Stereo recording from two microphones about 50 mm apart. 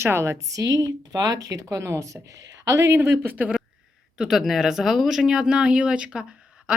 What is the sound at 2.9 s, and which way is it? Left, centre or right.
Speech, right.